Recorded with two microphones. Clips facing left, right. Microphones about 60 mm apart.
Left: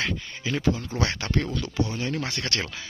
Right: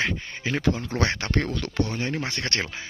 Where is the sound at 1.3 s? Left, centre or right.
Right.